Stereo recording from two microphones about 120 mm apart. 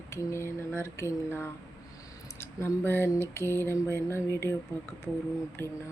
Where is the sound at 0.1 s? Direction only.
25° left (ahead or behind).